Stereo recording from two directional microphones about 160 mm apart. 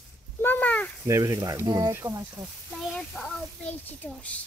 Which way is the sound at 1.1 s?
20° right (ahead or behind).